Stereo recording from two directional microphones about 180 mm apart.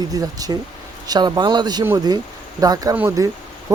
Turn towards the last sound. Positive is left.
turn(degrees=-15)  # may be behind; listen again after turning